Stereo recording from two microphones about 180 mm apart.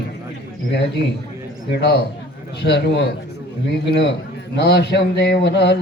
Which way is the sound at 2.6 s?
70° left (ahead or behind).